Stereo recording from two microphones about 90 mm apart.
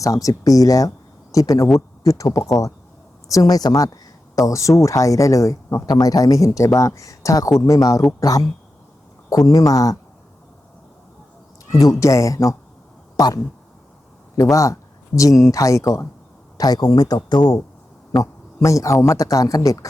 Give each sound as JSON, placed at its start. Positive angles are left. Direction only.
{"t": 0.0, "sound": "a man's voice", "side_deg": 40}
{"t": 9.5, "sound": "a man's voice", "side_deg": 40}
{"t": 11.7, "sound": "a man's voice", "side_deg": 40}
{"t": 14.5, "sound": "speech", "side_deg": 35}
{"t": 17.2, "sound": "speech", "side_deg": 55}
{"t": 18.2, "sound": "a man's voice", "side_deg": 35}